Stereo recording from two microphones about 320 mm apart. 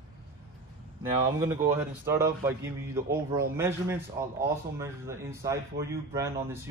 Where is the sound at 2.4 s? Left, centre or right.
Centre.